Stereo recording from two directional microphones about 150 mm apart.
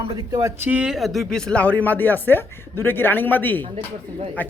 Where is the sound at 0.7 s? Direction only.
5° right (ahead or behind).